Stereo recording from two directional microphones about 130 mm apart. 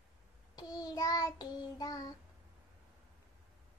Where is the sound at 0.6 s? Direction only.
30° left (ahead or behind).